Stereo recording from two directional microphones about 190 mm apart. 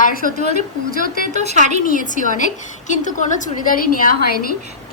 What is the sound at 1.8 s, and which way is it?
A woman's voice, 45° left (ahead or behind).